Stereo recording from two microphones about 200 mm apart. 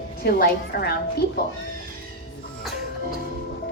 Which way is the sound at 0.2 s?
50° left (ahead or behind).